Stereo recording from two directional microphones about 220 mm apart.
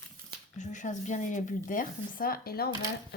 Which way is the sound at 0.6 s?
35° left (ahead or behind).